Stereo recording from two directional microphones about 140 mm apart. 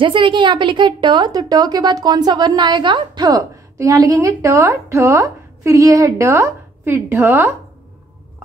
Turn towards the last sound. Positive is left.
turn(degrees=-15)  # may be behind; listen again after turning